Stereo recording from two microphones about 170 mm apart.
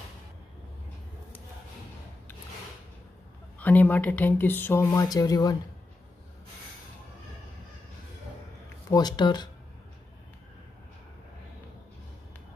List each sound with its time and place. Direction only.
3.5 s speech: 10° left (ahead or behind)
8.9 s speech: 25° left (ahead or behind)